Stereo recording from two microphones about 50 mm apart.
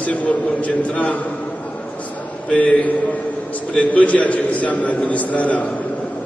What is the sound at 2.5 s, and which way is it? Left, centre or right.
A man's voice, left.